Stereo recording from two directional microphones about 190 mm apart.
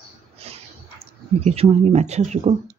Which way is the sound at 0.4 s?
30° right (ahead or behind).